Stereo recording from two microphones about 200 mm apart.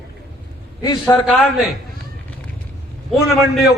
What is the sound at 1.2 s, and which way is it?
Speech, centre (ahead or behind).